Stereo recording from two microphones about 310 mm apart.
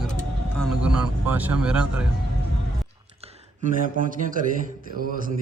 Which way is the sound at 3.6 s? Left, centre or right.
Right.